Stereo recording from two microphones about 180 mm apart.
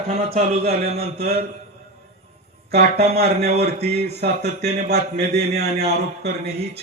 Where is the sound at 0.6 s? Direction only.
60° right (ahead or behind).